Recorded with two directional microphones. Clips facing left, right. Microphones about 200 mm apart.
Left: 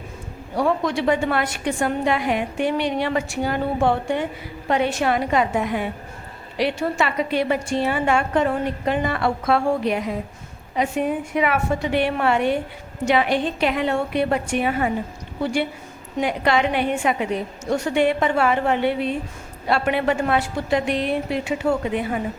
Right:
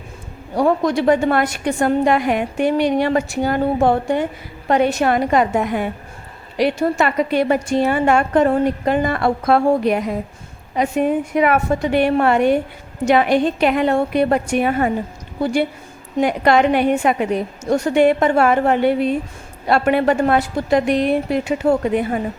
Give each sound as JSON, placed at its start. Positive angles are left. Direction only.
{"t": 0.5, "sound": "a woman's voice", "side_deg": -40}
{"t": 16.2, "sound": "a woman's voice", "side_deg": -45}